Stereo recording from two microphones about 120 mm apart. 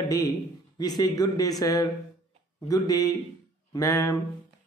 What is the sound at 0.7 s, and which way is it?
Speech, 30° left (ahead or behind).